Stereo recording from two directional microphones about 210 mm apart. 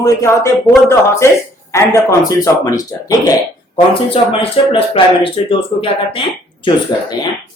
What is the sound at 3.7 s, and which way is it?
Speech, 25° left (ahead or behind).